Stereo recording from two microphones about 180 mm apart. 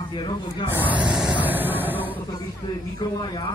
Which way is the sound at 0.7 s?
10° right (ahead or behind).